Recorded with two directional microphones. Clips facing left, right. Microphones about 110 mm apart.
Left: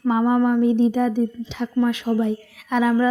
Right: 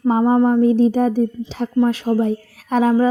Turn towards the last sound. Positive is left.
turn(degrees=-40)  # may be behind; listen again after turning